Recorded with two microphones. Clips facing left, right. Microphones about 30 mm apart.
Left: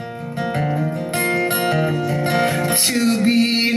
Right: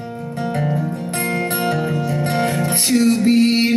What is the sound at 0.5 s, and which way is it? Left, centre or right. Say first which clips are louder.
Music: even; centre.